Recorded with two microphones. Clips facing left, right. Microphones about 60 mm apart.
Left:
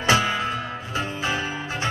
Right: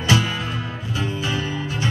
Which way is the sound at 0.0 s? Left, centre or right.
Left.